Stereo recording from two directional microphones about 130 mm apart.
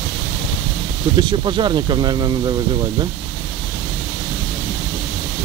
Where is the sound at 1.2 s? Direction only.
35° right (ahead or behind).